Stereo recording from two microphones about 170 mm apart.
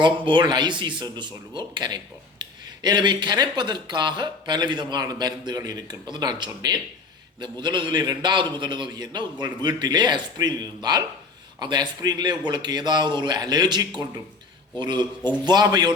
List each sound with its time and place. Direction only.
0.0 s speech: 25° right (ahead or behind)